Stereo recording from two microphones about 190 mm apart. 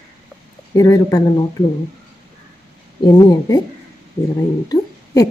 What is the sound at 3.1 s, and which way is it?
Speech, 20° left (ahead or behind).